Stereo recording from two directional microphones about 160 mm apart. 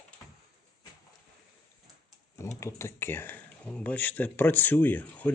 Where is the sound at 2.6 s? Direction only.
15° left (ahead or behind).